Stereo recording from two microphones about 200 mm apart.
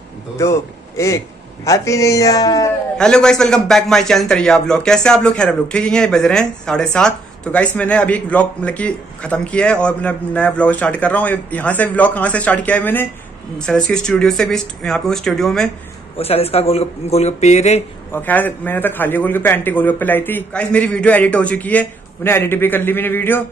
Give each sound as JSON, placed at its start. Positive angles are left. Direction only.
{"t": 0.4, "sound": "a man's voice", "side_deg": 15}
{"t": 3.0, "sound": "a man's voice", "side_deg": 5}
{"t": 16.2, "sound": "speech", "side_deg": 30}
{"t": 18.1, "sound": "a man's voice", "side_deg": 10}